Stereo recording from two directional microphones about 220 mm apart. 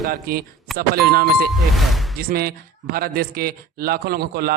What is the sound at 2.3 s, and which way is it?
A man's voice, 45° right (ahead or behind).